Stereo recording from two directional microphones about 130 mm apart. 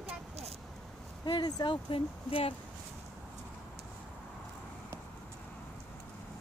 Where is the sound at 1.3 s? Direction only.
30° left (ahead or behind).